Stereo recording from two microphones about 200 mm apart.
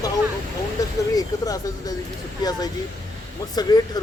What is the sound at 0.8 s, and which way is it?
Speech, 15° left (ahead or behind).